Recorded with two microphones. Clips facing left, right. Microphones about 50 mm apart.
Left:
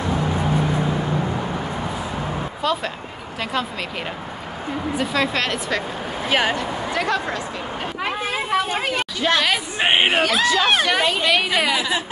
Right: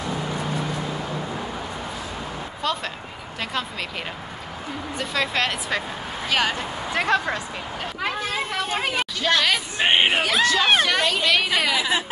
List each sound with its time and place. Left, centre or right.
2.6 s speech: centre
4.9 s speech: centre
6.2 s speech: left
6.9 s a sound: right
8.0 s speech: centre